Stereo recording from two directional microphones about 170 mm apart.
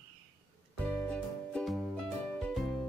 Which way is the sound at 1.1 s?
5° left (ahead or behind).